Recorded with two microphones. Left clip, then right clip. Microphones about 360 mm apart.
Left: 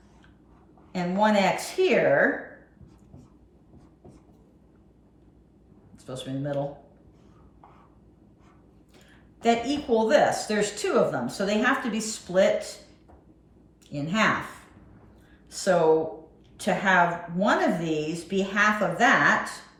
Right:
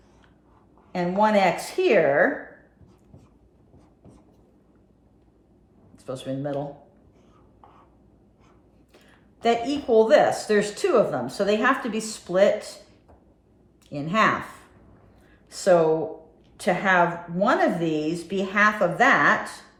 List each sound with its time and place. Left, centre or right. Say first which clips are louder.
0.9 s speech: right 3 dB; right
6.1 s speech: right 3 dB; right
9.4 s speech: right 1 dB; right
13.9 s speech: right 4 dB; right
15.4 s a sound: right 3 dB; right
16.6 s speech: right 1 dB; right